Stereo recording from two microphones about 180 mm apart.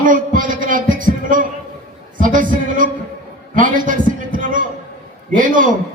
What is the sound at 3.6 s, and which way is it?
Heart sounds, 50° right (ahead or behind).